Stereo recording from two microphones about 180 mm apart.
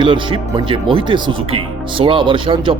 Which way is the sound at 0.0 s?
25° right (ahead or behind).